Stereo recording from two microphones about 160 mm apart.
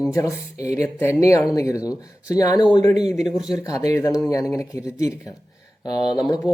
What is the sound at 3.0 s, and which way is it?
Speech, 5° right (ahead or behind).